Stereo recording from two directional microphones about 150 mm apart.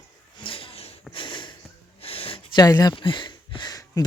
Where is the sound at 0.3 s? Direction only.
35° left (ahead or behind).